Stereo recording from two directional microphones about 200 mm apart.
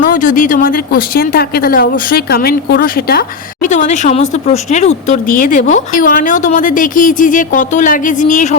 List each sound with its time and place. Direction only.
0.0 s speech: 40° left (ahead or behind)
3.7 s speech: 35° left (ahead or behind)